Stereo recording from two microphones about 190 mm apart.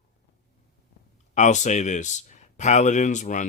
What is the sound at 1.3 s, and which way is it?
Speech, 40° left (ahead or behind).